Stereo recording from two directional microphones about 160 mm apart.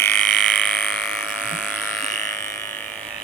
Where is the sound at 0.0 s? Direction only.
5° left (ahead or behind).